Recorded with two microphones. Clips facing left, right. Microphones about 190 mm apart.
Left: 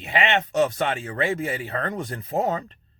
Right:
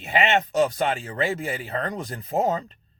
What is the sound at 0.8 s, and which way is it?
Speech, 35° right (ahead or behind).